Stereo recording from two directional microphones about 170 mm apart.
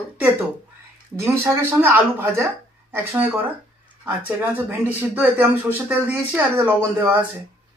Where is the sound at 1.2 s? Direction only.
15° right (ahead or behind).